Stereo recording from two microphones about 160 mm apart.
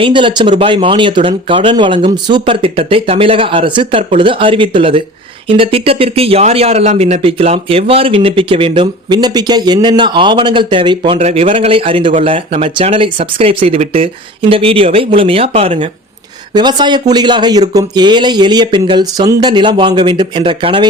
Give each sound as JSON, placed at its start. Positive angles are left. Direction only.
{"t": 0.0, "sound": "speech", "side_deg": -30}
{"t": 11.2, "sound": "speech", "side_deg": -45}
{"t": 16.6, "sound": "a man's voice", "side_deg": -25}